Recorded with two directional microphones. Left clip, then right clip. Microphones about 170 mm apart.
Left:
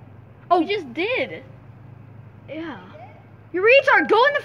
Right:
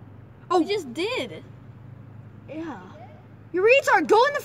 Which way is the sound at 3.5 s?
60° right (ahead or behind).